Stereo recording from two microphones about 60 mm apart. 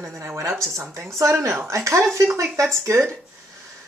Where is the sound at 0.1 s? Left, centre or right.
Right.